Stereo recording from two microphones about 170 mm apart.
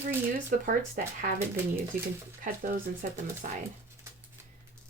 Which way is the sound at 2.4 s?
50° right (ahead or behind).